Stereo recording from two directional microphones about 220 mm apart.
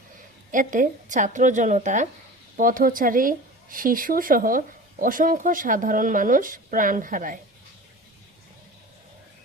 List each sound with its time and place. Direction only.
0.5 s speech: 35° right (ahead or behind)